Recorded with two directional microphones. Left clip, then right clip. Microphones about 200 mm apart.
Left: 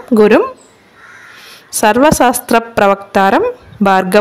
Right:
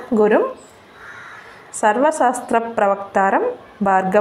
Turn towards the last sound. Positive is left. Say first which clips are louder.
# left 5 dB
turn(degrees=55)  # may be behind; listen again after turning